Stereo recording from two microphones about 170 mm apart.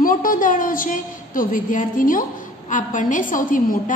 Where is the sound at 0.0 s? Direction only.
55° left (ahead or behind).